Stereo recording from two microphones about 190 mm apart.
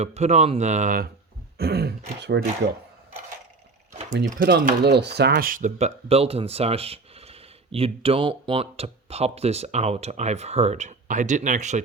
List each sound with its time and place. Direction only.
0.0 s speech: 35° right (ahead or behind)
1.5 s speech: 55° right (ahead or behind)
4.3 s speech: 50° right (ahead or behind)